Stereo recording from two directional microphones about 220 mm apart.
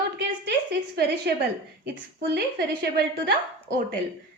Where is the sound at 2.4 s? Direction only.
45° right (ahead or behind).